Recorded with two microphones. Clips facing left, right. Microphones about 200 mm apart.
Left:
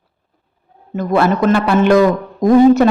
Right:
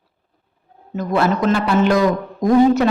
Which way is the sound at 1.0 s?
60° left (ahead or behind).